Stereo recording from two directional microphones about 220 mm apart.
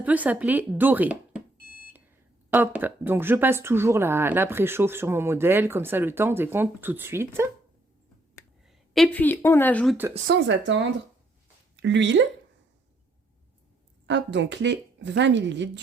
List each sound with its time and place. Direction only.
0.0 s speech: 5° right (ahead or behind)
2.5 s speech: 10° right (ahead or behind)
8.6 s speech: centre (ahead or behind)
10.2 s speech: 55° right (ahead or behind)
11.8 s speech: 55° right (ahead or behind)
14.1 s speech: 55° right (ahead or behind)